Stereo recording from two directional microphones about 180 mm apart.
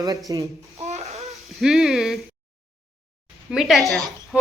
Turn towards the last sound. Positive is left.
turn(degrees=-5)  # may be behind; listen again after turning